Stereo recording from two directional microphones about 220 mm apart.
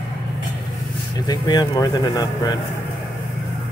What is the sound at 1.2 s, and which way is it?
Speech, 20° left (ahead or behind).